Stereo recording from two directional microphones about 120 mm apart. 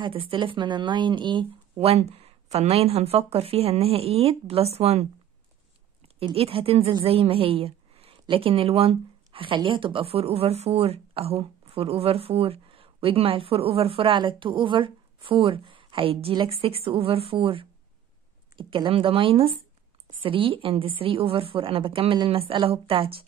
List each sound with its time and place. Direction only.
0.0 s speech: 45° right (ahead or behind)
1.8 s speech: 60° right (ahead or behind)
6.1 s a woman's voice: 55° right (ahead or behind)